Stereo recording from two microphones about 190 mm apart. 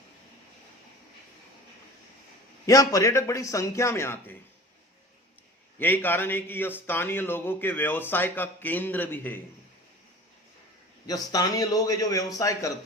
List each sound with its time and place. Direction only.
2.6 s a man's voice: 15° left (ahead or behind)
5.8 s a man's voice: 10° left (ahead or behind)
11.0 s a man's voice: 20° left (ahead or behind)